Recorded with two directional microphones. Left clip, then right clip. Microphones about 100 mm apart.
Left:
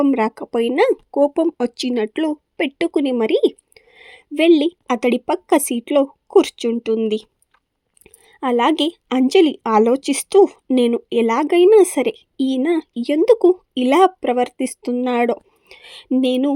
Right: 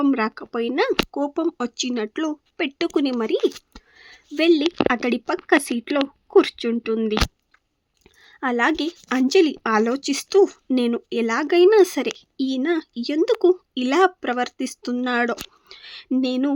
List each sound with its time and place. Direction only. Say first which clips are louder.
0.1 s a woman's voice: left 4 dB; 45° left (ahead or behind); by 3.2 s 20° left (ahead or behind)
3.2 s a woman's voice: left 5 dB; 35° left (ahead or behind)